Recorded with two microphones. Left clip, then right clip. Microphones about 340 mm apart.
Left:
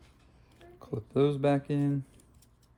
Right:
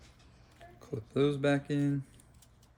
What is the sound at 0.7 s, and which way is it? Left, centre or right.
Speech, centre.